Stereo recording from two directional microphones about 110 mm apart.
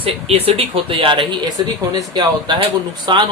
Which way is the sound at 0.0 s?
60° right (ahead or behind).